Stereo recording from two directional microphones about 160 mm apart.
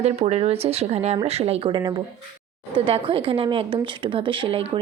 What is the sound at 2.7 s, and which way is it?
Speech, 35° right (ahead or behind).